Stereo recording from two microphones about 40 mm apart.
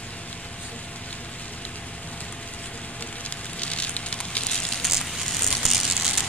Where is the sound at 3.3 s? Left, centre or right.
Left.